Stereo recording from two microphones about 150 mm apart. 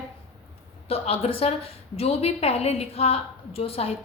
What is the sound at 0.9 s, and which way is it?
A woman's voice, 40° left (ahead or behind).